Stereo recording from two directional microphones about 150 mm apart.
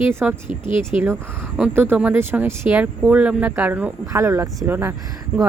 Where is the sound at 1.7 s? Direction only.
15° right (ahead or behind).